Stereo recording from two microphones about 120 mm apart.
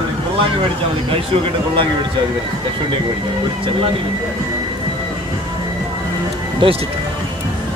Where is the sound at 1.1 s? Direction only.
50° right (ahead or behind).